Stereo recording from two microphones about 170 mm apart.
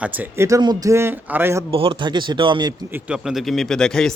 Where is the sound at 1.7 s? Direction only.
35° right (ahead or behind).